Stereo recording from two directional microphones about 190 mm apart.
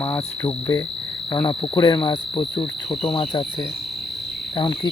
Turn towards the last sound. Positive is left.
turn(degrees=20)  # may be behind; listen again after turning